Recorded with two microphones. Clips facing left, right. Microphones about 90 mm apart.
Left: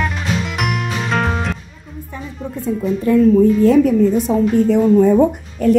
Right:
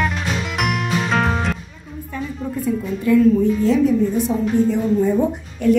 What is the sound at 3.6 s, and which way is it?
A woman's voice, 55° left (ahead or behind).